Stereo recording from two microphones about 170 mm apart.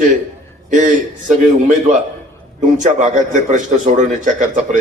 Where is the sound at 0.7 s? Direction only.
45° right (ahead or behind).